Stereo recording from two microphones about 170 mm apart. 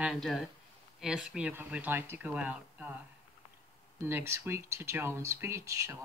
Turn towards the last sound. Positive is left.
turn(degrees=-20)  # may be behind; listen again after turning